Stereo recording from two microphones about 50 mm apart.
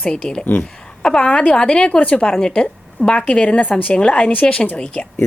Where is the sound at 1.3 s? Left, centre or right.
Left.